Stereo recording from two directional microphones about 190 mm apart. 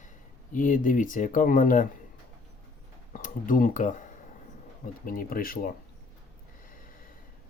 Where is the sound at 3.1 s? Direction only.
45° left (ahead or behind).